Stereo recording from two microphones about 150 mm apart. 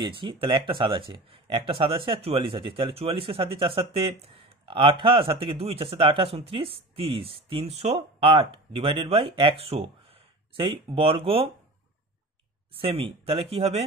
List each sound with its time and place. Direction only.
0.0 s speech: 35° right (ahead or behind)
12.7 s speech: 35° right (ahead or behind)